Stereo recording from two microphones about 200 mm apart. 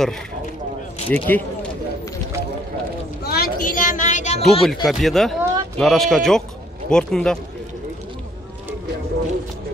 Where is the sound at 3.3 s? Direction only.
45° left (ahead or behind).